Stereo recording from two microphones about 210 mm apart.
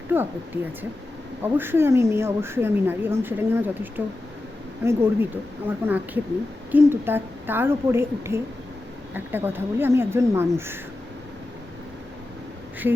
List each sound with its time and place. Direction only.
0.1 s speech: 10° right (ahead or behind)